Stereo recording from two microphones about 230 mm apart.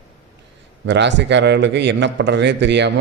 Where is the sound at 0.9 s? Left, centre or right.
Right.